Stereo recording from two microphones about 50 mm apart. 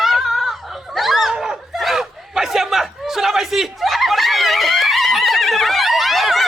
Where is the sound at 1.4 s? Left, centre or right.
Centre.